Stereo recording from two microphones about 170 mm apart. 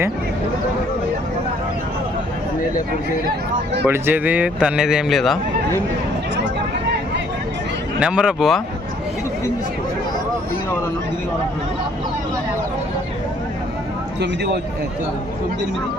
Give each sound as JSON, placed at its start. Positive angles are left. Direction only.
{"t": 3.8, "sound": "speech", "side_deg": -15}
{"t": 7.9, "sound": "speech", "side_deg": -5}
{"t": 14.2, "sound": "speech", "side_deg": -80}